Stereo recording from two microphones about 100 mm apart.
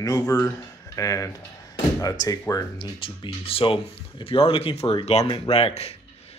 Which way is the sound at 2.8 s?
55° left (ahead or behind).